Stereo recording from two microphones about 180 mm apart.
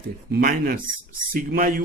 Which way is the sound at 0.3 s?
60° right (ahead or behind).